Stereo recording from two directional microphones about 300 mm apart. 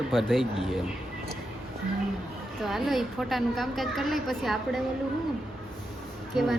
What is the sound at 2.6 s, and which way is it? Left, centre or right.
A woman's voice, centre.